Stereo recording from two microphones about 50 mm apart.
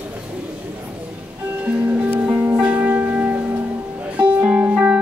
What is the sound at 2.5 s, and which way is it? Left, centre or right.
Music, right.